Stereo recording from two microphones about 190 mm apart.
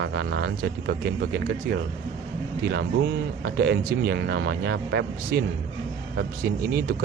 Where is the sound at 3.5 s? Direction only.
60° right (ahead or behind).